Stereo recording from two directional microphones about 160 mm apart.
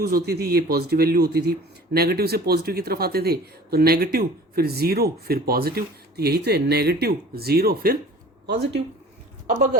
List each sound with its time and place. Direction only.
0.0 s speech: 70° right (ahead or behind)
8.4 s speech: 90° right